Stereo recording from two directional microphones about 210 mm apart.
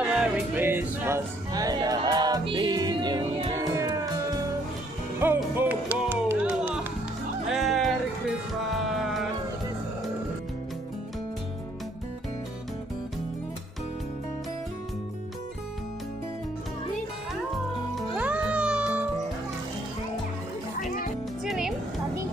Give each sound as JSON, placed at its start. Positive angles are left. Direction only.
{"t": 0.0, "sound": "music", "side_deg": -5}
{"t": 5.2, "sound": "music", "side_deg": -10}
{"t": 18.1, "sound": "music", "side_deg": -5}
{"t": 21.5, "sound": "music", "side_deg": -5}